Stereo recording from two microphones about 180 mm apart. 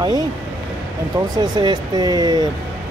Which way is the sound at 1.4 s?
25° right (ahead or behind).